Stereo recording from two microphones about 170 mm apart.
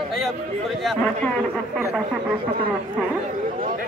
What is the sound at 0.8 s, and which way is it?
Speech, 10° left (ahead or behind).